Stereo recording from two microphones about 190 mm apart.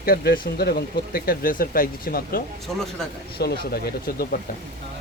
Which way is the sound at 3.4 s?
55° left (ahead or behind).